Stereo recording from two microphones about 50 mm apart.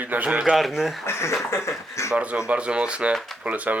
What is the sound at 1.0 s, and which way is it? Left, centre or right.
Speech, left.